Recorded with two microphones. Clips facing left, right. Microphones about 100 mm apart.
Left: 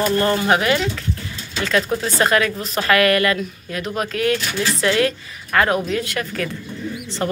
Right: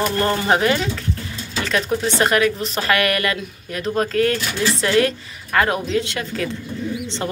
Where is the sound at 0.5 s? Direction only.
30° right (ahead or behind).